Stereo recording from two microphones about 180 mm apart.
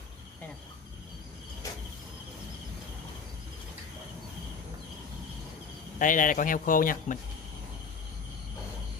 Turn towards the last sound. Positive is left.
turn(degrees=50)  # may be behind; listen again after turning